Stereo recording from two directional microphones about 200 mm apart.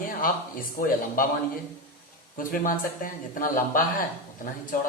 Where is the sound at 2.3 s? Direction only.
45° left (ahead or behind).